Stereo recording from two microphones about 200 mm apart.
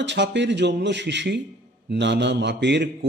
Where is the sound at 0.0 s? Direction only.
60° right (ahead or behind).